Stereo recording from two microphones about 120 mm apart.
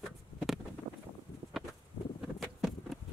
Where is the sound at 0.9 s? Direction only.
40° right (ahead or behind).